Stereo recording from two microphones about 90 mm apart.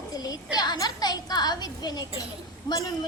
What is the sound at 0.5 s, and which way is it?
A woman's voice, 50° left (ahead or behind).